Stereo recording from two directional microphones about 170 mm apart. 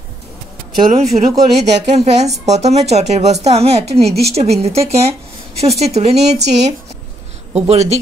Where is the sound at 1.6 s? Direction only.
40° right (ahead or behind).